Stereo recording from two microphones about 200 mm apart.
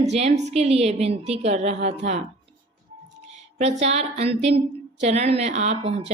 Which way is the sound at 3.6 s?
35° right (ahead or behind).